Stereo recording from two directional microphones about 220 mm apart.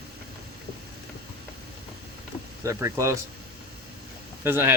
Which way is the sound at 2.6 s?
15° right (ahead or behind).